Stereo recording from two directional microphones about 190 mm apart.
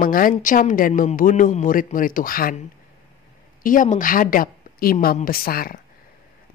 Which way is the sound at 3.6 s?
45° left (ahead or behind).